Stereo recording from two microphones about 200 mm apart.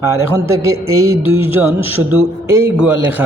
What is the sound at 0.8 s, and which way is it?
Music, 90° right.